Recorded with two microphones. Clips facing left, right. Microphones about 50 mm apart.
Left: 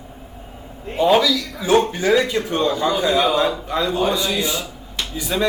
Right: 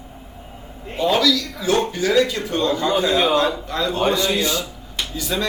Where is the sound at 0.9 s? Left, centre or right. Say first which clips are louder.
Left 2 dB; centre.